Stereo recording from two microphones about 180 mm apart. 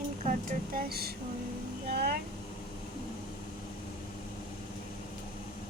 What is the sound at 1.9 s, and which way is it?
Vehicle, 60° right (ahead or behind).